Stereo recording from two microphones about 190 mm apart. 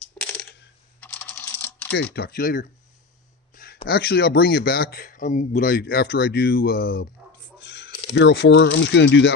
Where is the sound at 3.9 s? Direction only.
60° left (ahead or behind).